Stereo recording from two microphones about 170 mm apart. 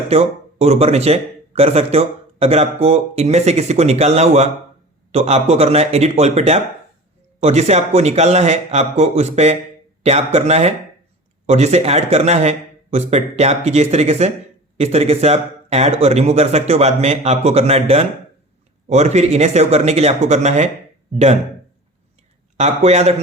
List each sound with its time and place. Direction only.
0.1 s speech: 40° right (ahead or behind)
22.5 s speech: 40° right (ahead or behind)